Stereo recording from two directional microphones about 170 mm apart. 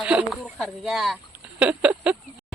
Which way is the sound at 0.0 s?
5° right (ahead or behind).